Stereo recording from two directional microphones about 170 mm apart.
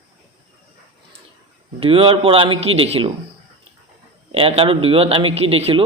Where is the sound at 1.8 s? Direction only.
30° right (ahead or behind).